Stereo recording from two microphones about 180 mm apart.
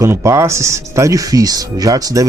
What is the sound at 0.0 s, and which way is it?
Speech, 15° right (ahead or behind).